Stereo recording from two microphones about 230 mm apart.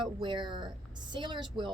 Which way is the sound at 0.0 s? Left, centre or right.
Right.